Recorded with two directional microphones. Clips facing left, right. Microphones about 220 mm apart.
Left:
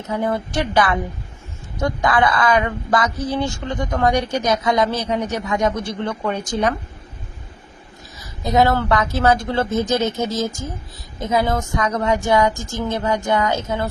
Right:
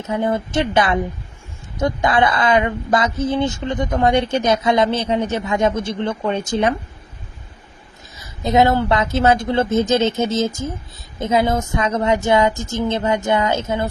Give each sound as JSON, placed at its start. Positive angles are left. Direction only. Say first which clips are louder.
{"t": 0.1, "sound": "a woman's voice", "louder": "right 2 dB", "side_deg": -20}
{"t": 8.4, "sound": "a woman's voice", "louder": "right 2 dB", "side_deg": -20}